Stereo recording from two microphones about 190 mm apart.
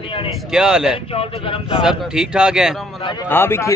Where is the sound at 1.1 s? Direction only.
30° left (ahead or behind).